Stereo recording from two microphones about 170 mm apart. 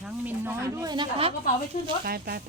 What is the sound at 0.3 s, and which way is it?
Speech, 15° right (ahead or behind).